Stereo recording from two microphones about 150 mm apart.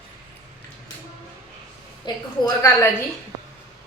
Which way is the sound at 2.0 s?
20° left (ahead or behind).